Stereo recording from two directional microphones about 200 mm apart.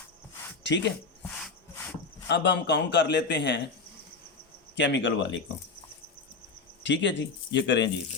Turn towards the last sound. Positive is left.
turn(degrees=60)  # may be behind; listen again after turning